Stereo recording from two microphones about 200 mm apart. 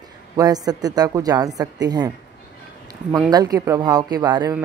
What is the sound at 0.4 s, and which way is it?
Speech, 20° right (ahead or behind).